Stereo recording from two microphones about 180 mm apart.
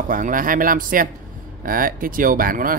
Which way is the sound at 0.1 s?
50° right (ahead or behind).